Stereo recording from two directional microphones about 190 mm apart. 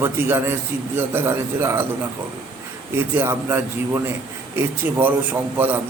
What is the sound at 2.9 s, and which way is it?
A man's voice, 15° right (ahead or behind).